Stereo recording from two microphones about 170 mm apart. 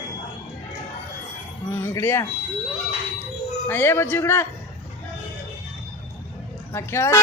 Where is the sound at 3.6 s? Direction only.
15° left (ahead or behind).